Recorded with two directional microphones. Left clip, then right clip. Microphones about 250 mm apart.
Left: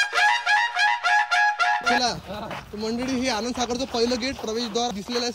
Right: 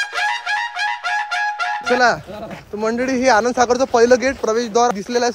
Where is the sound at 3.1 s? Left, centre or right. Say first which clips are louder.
Right 13 dB; centre.